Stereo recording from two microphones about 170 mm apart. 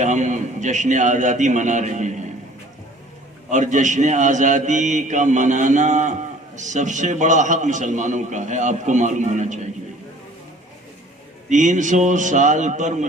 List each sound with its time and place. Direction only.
0.0 s a man's voice: 45° right (ahead or behind)
3.5 s a man's voice: 45° right (ahead or behind)
11.4 s a man's voice: 45° right (ahead or behind)